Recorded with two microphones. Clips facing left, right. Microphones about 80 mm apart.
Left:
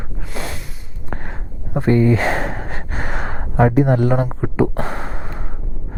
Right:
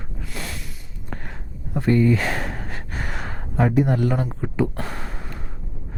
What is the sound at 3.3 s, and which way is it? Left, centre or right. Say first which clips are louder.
Speech: left 5 dB; left.